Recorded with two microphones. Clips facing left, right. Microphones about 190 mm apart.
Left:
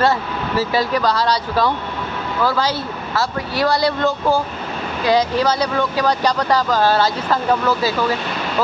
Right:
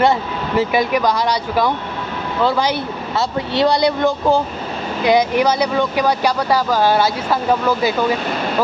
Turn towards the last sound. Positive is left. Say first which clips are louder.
# right 1 dB
turn(degrees=-10)  # may be behind; listen again after turning